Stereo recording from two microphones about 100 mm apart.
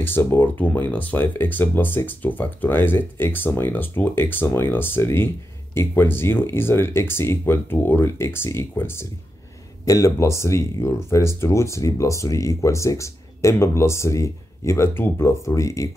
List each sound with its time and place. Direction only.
0.0 s speech: 20° left (ahead or behind)
9.8 s speech: 35° left (ahead or behind)